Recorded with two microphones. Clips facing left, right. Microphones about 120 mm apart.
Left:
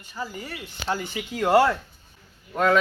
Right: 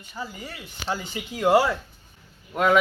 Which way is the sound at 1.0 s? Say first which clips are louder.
Right 5 dB; 15° right (ahead or behind).